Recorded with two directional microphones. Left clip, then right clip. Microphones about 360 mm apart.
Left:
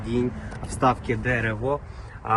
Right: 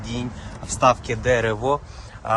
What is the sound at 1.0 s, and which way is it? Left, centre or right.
Speech, centre.